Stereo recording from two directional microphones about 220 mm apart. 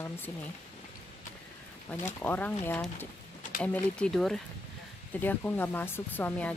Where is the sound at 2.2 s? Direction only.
10° left (ahead or behind).